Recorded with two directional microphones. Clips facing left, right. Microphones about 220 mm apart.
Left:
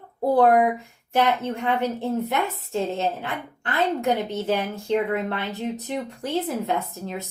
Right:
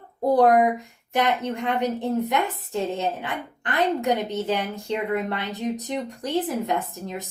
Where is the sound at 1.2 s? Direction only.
15° right (ahead or behind).